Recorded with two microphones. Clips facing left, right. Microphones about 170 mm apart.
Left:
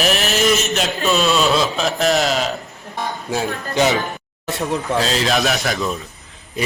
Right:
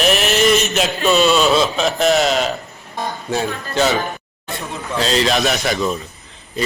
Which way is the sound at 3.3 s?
10° left (ahead or behind).